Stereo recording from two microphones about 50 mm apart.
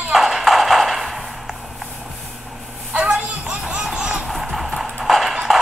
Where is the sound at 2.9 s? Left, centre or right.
Centre.